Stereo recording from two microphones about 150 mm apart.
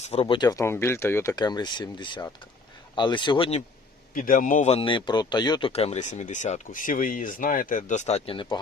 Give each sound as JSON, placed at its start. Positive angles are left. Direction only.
{"t": 0.0, "sound": "speech", "side_deg": 40}
{"t": 4.1, "sound": "a man's voice", "side_deg": 60}
{"t": 4.7, "sound": "speech", "side_deg": 35}